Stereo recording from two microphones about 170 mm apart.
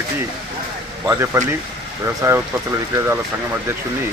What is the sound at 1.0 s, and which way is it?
Speech, 15° right (ahead or behind).